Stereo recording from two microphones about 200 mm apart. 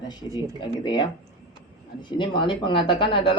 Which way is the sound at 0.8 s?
20° left (ahead or behind).